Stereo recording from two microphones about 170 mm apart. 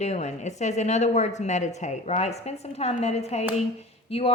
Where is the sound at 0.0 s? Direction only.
40° left (ahead or behind).